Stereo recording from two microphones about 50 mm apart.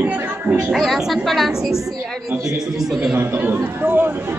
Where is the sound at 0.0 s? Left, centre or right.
Right.